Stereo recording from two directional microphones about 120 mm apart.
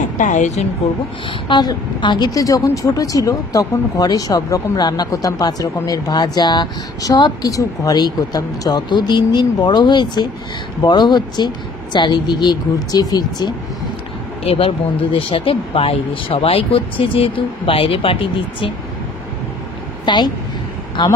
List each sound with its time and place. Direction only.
0.2 s a woman's voice: 80° left
1.5 s speech: 40° left (ahead or behind)
14.4 s speech: 55° left (ahead or behind)
20.1 s speech: 40° left (ahead or behind)